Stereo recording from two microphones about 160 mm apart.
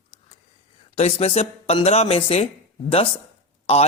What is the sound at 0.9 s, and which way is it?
Speech, 40° left (ahead or behind).